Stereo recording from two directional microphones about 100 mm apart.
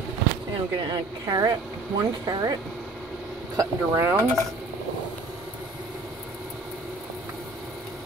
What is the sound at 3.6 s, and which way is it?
Speech, 25° right (ahead or behind).